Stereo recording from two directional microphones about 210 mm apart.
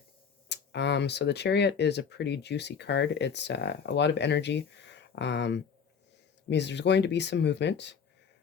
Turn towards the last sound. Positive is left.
turn(degrees=55)  # may be behind; listen again after turning